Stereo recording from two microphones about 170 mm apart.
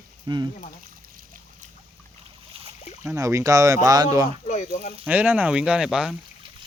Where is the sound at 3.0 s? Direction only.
15° right (ahead or behind).